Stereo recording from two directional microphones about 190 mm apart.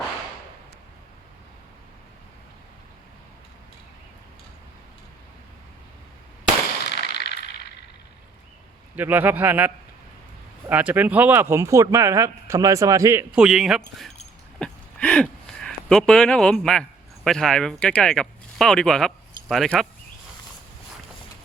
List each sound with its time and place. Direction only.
6.9 s firecracker: 60° left (ahead or behind)
9.0 s speech: 10° right (ahead or behind)
13.3 s speech: 5° right (ahead or behind)
14.6 s a sound: 5° left (ahead or behind)
17.2 s speech: centre (ahead or behind)